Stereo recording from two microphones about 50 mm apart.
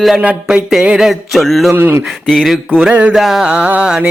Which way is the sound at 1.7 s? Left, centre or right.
Right.